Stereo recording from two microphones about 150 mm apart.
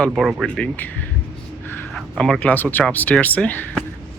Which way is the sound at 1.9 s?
Centre (ahead or behind).